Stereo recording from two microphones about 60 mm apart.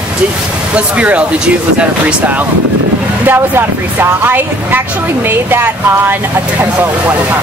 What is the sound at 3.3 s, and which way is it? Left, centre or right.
Speech, right.